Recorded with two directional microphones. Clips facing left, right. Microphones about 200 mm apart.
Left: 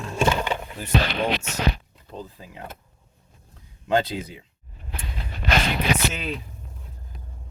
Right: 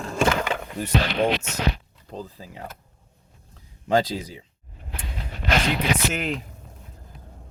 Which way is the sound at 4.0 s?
35° right (ahead or behind).